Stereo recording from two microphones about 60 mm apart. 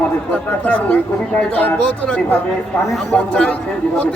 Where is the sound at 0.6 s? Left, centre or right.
Left.